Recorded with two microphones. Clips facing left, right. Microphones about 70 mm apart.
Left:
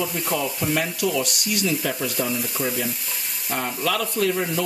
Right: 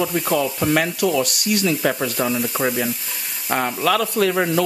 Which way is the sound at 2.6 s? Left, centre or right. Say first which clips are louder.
Right 5 dB; right.